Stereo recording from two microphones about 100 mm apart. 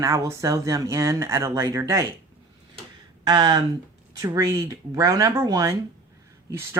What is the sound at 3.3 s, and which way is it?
Speech, 45° right (ahead or behind).